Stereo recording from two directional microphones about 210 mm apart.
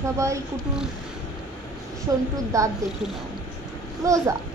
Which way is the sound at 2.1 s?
15° right (ahead or behind).